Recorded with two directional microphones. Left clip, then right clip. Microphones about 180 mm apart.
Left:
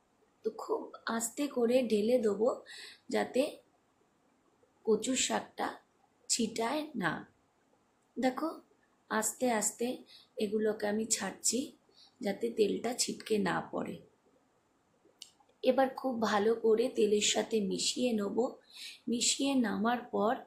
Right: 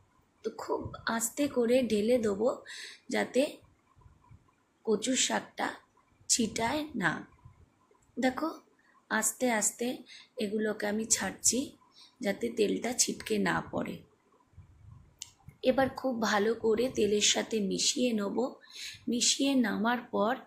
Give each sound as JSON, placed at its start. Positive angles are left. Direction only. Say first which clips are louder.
{"t": 0.4, "sound": "speech", "louder": "right 1 dB", "side_deg": -10}
{"t": 4.9, "sound": "speech", "louder": "right 1 dB", "side_deg": -5}
{"t": 8.2, "sound": "speech", "louder": "right 2 dB", "side_deg": -10}
{"t": 15.2, "sound": "speech", "louder": "right 2 dB", "side_deg": -5}